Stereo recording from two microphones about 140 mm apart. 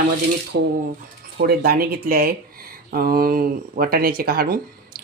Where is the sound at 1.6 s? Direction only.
90° right.